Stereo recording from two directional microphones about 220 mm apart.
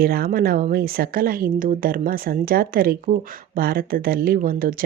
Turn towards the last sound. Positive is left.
turn(degrees=-40)  # may be behind; listen again after turning